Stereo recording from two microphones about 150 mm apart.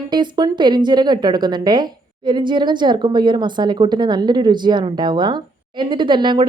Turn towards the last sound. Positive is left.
turn(degrees=-30)  # may be behind; listen again after turning